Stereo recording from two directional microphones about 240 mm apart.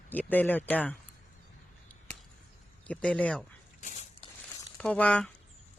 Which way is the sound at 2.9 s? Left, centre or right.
Centre.